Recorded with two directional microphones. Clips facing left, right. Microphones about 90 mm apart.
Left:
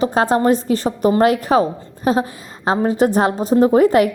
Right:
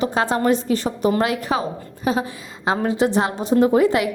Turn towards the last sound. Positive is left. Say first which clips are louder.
# left 4 dB
turn(degrees=45)  # may be behind; listen again after turning